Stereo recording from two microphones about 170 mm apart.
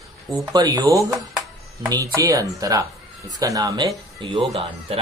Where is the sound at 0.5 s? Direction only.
20° right (ahead or behind).